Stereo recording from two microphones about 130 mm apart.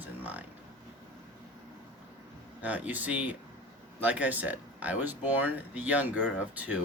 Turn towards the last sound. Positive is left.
turn(degrees=-10)  # may be behind; listen again after turning